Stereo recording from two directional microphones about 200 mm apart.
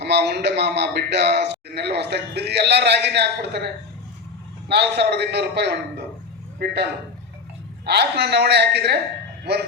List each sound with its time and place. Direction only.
0.0 s a man's voice: 55° right (ahead or behind)
4.7 s a man's voice: 55° right (ahead or behind)
7.9 s a man's voice: 55° right (ahead or behind)